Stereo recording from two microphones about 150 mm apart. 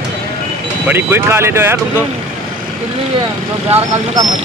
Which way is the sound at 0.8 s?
15° right (ahead or behind).